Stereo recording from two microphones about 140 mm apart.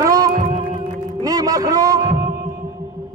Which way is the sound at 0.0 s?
25° right (ahead or behind).